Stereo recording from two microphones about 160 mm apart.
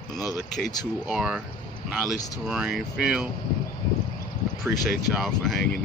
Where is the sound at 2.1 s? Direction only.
20° left (ahead or behind).